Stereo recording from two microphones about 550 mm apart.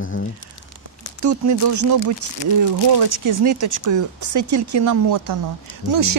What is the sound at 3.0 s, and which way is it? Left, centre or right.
Speech, right.